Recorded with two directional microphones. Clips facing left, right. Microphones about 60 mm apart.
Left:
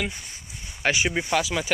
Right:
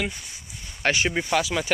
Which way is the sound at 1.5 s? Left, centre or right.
Centre.